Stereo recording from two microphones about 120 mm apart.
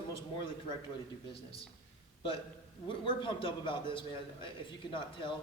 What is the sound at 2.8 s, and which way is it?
A man's voice, 45° left (ahead or behind).